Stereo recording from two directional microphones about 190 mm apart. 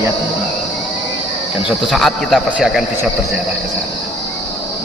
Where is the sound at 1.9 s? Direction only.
Centre (ahead or behind).